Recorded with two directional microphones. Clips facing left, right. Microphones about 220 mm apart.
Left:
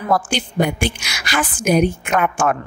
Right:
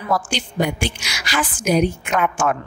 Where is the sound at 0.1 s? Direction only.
50° left (ahead or behind).